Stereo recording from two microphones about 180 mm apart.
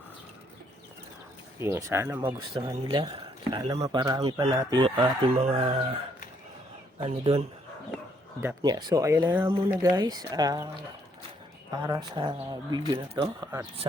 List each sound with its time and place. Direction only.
1.5 s speech: 15° right (ahead or behind)
2.2 s speech: 25° right (ahead or behind)
7.1 s speech: 30° right (ahead or behind)
8.4 s speech: 15° right (ahead or behind)
11.7 s speech: 20° right (ahead or behind)